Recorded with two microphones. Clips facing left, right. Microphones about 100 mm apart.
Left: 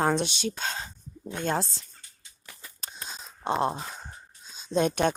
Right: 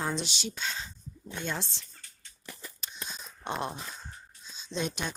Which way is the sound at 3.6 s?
35° left (ahead or behind).